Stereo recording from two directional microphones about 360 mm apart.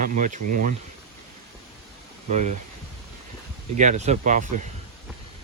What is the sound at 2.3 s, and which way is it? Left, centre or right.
Speech, centre.